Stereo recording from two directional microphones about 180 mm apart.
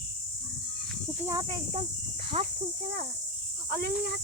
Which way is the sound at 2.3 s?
35° right (ahead or behind).